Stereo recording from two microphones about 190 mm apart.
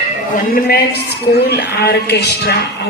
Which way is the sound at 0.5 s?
55° left (ahead or behind).